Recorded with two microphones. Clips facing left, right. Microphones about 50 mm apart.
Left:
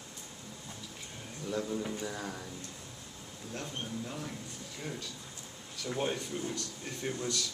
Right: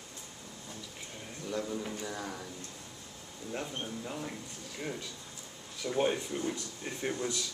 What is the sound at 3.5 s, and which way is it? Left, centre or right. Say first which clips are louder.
Speech: right 2 dB; centre.